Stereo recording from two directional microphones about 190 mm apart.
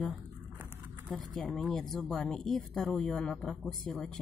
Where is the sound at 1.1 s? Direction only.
Centre (ahead or behind).